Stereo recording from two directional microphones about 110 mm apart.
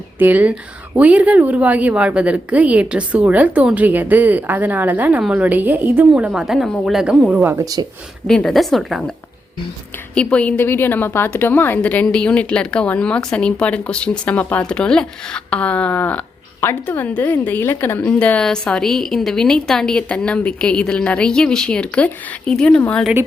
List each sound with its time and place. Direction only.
0.2 s a woman's voice: 15° right (ahead or behind)
7.4 s speech: 20° right (ahead or behind)
8.3 s a woman's voice: 5° left (ahead or behind)
10.2 s a woman's voice: 10° left (ahead or behind)